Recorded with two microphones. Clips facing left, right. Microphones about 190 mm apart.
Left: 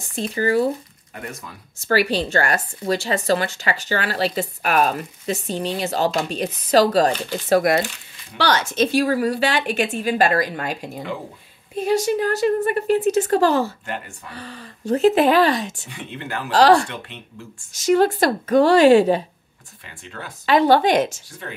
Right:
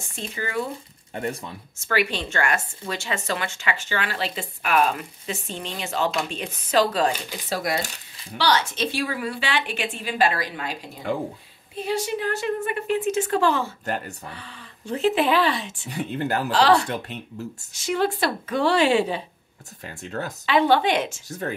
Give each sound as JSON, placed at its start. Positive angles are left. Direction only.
{"t": 0.1, "sound": "speech", "side_deg": 35}
{"t": 1.1, "sound": "speech", "side_deg": -30}
{"t": 1.8, "sound": "speech", "side_deg": 35}
{"t": 7.4, "sound": "a woman's voice", "side_deg": 55}
{"t": 13.8, "sound": "speech", "side_deg": -40}
{"t": 14.3, "sound": "a woman's voice", "side_deg": 40}
{"t": 15.9, "sound": "speech", "side_deg": -40}
{"t": 16.4, "sound": "speech", "side_deg": 40}
{"t": 16.8, "sound": "speech", "side_deg": -40}
{"t": 17.7, "sound": "a woman's voice", "side_deg": 40}
{"t": 19.9, "sound": "speech", "side_deg": -40}
{"t": 20.4, "sound": "speech", "side_deg": 40}
{"t": 21.3, "sound": "speech", "side_deg": -40}